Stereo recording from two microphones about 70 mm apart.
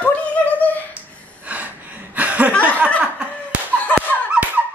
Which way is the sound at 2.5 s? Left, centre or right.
Left.